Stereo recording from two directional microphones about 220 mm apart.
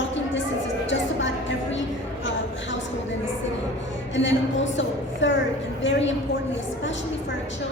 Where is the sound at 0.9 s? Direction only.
55° left (ahead or behind).